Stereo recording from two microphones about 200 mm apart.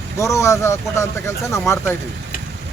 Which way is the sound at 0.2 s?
15° left (ahead or behind).